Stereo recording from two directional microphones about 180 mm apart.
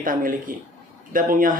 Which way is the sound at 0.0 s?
50° right (ahead or behind).